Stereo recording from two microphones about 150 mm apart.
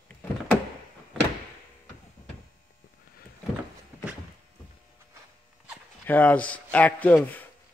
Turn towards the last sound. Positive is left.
turn(degrees=10)  # may be behind; listen again after turning